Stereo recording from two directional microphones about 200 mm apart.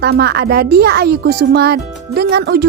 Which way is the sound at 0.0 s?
55° right (ahead or behind).